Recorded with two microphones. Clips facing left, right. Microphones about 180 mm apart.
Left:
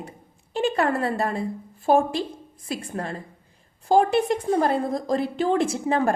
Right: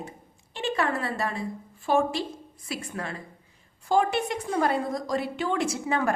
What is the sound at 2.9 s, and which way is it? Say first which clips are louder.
A woman's voice: left 4 dB; 45° left (ahead or behind).